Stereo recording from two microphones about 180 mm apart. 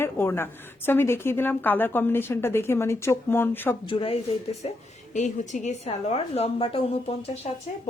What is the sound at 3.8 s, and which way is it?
A woman's voice, 30° left (ahead or behind).